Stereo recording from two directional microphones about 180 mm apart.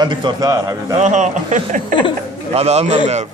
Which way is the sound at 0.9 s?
40° right (ahead or behind).